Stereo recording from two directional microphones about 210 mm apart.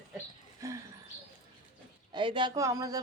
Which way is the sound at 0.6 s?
15° right (ahead or behind).